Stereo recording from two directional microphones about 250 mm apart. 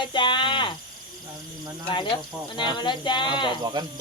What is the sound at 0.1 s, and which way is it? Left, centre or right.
Cricket, centre.